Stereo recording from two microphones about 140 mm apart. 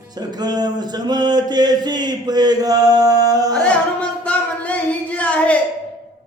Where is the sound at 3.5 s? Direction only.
10° left (ahead or behind).